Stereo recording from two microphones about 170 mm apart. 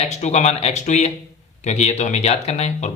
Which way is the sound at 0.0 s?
40° left (ahead or behind).